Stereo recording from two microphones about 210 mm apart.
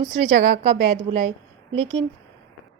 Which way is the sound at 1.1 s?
30° right (ahead or behind).